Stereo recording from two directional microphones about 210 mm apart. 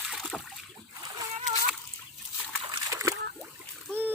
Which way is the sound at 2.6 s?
20° right (ahead or behind).